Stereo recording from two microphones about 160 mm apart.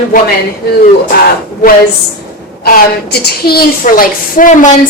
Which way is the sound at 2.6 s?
80° left.